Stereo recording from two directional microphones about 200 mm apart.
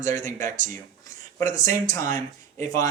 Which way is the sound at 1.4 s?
15° left (ahead or behind).